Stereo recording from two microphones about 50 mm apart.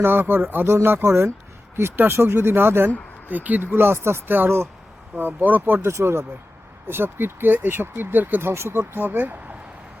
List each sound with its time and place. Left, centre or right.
0.0 s speech: right
3.2 s speech: right
3.6 s speech: right
5.1 s speech: right
5.9 s speech: right
6.8 s speech: right
8.4 s speech: right